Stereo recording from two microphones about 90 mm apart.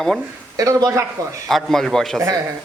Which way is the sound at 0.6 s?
40° right (ahead or behind).